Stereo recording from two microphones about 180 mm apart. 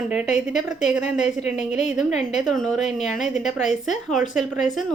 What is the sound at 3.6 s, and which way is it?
Speech, 40° left (ahead or behind).